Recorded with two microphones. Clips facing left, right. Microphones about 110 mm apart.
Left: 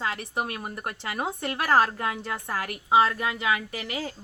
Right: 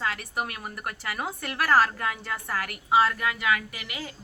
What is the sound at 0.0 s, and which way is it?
A woman's voice, 20° left (ahead or behind).